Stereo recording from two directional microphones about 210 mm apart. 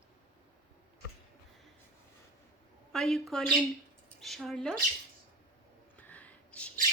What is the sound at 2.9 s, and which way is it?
A woman's voice, centre (ahead or behind).